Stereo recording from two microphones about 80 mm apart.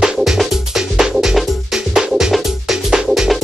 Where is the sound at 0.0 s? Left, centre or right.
Centre.